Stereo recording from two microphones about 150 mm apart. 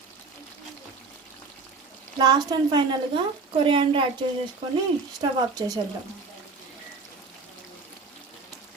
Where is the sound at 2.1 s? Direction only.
30° right (ahead or behind).